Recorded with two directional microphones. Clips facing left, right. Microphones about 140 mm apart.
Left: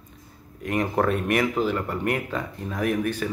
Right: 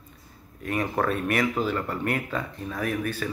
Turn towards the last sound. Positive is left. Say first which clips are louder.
# left 4 dB
turn(degrees=15)  # may be behind; listen again after turning